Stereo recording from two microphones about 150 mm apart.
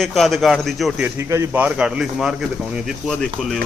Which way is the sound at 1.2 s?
20° right (ahead or behind).